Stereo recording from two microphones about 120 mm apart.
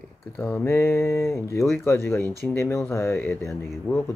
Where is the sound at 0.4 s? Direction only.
15° left (ahead or behind).